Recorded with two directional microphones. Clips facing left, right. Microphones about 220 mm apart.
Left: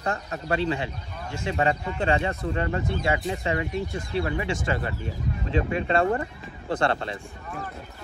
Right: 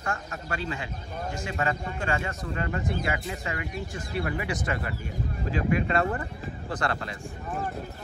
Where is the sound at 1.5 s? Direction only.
30° left (ahead or behind).